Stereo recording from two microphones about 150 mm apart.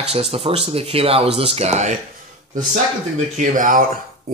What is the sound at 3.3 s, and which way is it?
Speech, 60° right (ahead or behind).